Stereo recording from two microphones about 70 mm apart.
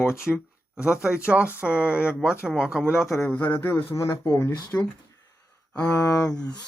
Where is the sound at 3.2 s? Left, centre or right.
Left.